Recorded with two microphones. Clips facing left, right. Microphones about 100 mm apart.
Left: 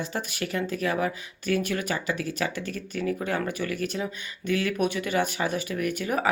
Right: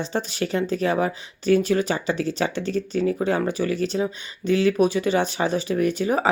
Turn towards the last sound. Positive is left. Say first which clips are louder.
# right 5 dB
turn(degrees=-25)  # may be behind; listen again after turning